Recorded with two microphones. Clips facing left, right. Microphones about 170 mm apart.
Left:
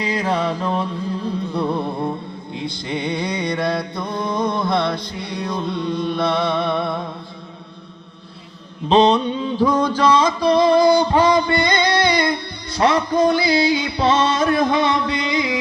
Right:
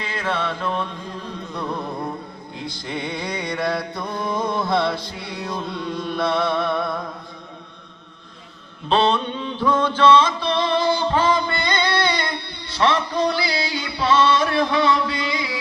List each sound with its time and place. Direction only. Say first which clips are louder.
0.0 s music: left 5 dB; 35° left (ahead or behind)
2.8 s music: left 4 dB; centre (ahead or behind)
4.0 s music: left 3 dB; 20° left (ahead or behind)
5.1 s music: left 4 dB; 5° right (ahead or behind)
6.6 s music: left 2 dB; 25° left (ahead or behind)
9.0 s music: left 6 dB; 35° left (ahead or behind)
11.9 s music: left 4 dB; 15° left (ahead or behind)
12.1 s music: left 7 dB; 45° left (ahead or behind)
14.7 s a sound: left 1 dB; 20° left (ahead or behind)
15.0 s music: left 4 dB; 20° left (ahead or behind)